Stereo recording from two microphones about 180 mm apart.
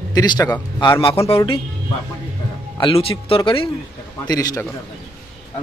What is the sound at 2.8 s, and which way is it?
Speech, 30° left (ahead or behind).